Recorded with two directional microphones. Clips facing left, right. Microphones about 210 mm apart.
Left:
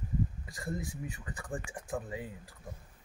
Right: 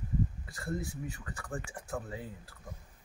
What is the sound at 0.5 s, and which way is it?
A man's voice, 15° left (ahead or behind).